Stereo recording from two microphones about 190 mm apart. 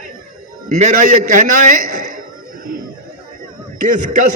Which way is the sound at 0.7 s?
40° right (ahead or behind).